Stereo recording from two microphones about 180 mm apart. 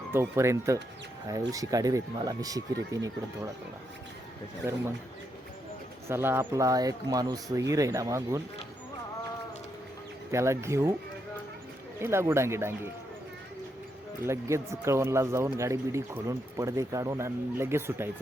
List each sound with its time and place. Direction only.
0.1 s speech: 15° right (ahead or behind)
6.1 s speech: 15° right (ahead or behind)
10.3 s speech: 15° right (ahead or behind)
11.9 s speech: 15° right (ahead or behind)
14.3 s speech: 15° right (ahead or behind)